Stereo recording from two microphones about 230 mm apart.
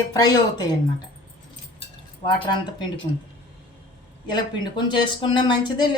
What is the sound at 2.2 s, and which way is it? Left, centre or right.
Speech, centre.